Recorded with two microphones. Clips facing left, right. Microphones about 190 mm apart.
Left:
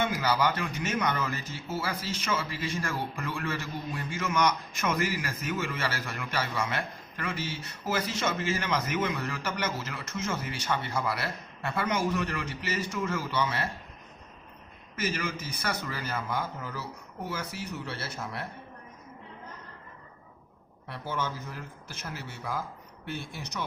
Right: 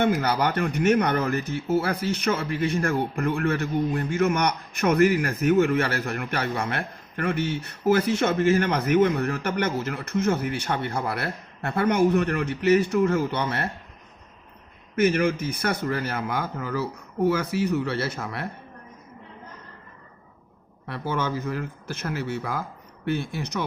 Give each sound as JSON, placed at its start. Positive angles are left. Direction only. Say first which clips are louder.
{"t": 0.0, "sound": "speech", "louder": "right 5 dB", "side_deg": -60}
{"t": 14.9, "sound": "speech", "louder": "right 11 dB", "side_deg": -60}
{"t": 20.8, "sound": "speech", "louder": "right 6 dB", "side_deg": -70}